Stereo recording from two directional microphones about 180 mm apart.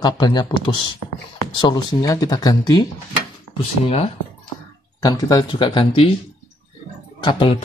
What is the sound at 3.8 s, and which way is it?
Speech, 35° left (ahead or behind).